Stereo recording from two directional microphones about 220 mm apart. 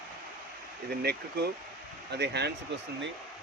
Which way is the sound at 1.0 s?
45° right (ahead or behind).